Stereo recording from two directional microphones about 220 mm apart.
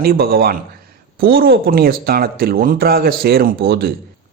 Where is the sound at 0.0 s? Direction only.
45° right (ahead or behind).